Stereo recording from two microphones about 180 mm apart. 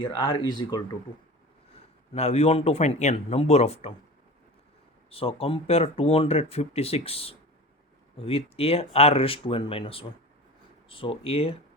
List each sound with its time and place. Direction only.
0.0 s speech: 25° left (ahead or behind)
1.7 s speech: 35° left (ahead or behind)
5.1 s speech: 30° left (ahead or behind)